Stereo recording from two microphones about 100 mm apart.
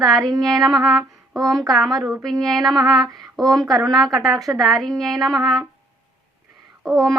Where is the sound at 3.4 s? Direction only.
40° right (ahead or behind).